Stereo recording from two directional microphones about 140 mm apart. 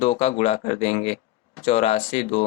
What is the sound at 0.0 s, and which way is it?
Speech, 45° left (ahead or behind).